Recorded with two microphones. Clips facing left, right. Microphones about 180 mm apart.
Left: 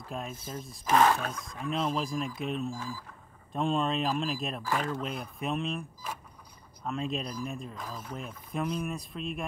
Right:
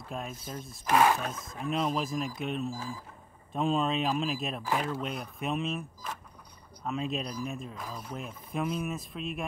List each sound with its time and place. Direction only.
0.0 s speech: centre (ahead or behind)